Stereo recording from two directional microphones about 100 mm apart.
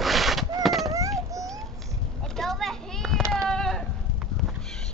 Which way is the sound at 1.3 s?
35° right (ahead or behind).